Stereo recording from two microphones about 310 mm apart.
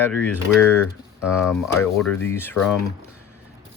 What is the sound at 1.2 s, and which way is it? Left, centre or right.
Speech, centre.